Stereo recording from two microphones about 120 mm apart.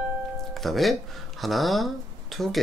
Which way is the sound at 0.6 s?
Centre (ahead or behind).